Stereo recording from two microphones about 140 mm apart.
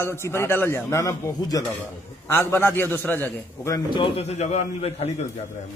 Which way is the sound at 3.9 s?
40° left (ahead or behind).